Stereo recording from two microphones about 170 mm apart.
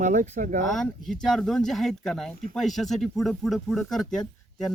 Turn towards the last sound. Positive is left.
turn(degrees=0)  # may be behind; listen again after turning